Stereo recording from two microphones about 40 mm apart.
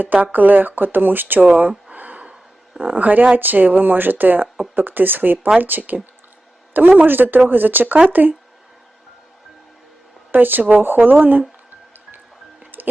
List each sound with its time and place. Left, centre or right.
0.0 s speech: right
1.5 s speech: right
2.0 s a sound: right
2.8 s speech: right
10.3 s speech: right
12.8 s music: right